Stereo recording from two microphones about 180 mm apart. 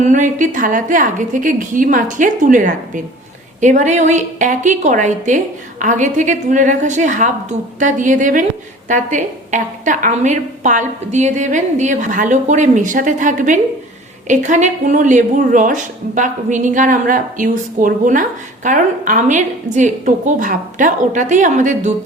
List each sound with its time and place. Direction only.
0.0 s speech: 45° right (ahead or behind)